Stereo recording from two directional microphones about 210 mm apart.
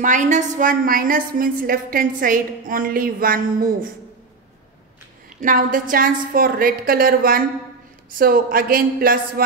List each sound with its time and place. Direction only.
0.0 s a woman's voice: 35° right (ahead or behind)
5.4 s a woman's voice: 40° right (ahead or behind)